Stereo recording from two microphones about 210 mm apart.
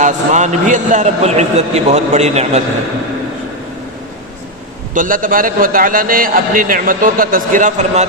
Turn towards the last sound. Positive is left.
turn(degrees=-35)  # may be behind; listen again after turning